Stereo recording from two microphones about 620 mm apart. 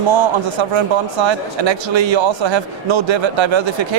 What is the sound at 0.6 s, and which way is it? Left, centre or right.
Speech, right.